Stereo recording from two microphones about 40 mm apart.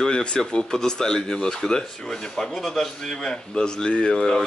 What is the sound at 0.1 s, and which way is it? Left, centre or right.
A man's voice, left.